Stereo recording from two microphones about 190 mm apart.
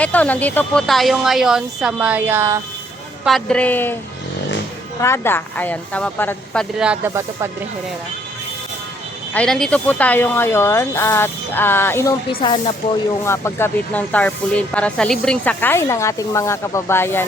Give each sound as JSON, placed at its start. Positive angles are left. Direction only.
{"t": 0.0, "sound": "speech", "side_deg": 10}
{"t": 3.2, "sound": "speech", "side_deg": 5}
{"t": 4.9, "sound": "speech", "side_deg": 15}
{"t": 9.3, "sound": "speech", "side_deg": 5}
{"t": 12.3, "sound": "speech", "side_deg": 30}
{"t": 13.2, "sound": "speech", "side_deg": 15}